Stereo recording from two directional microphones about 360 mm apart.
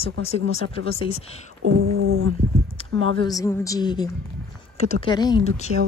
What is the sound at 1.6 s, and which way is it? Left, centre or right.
Music, right.